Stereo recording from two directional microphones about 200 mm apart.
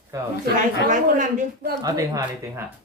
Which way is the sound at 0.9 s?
40° right (ahead or behind).